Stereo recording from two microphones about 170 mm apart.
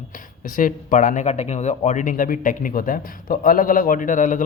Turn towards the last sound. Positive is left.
turn(degrees=50)  # may be behind; listen again after turning